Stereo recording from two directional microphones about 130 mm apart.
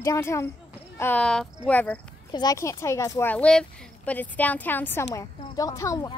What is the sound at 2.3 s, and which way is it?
A child's voice, 30° left (ahead or behind).